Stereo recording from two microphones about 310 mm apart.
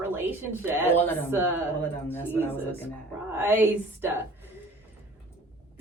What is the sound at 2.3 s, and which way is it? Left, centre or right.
Speech, centre.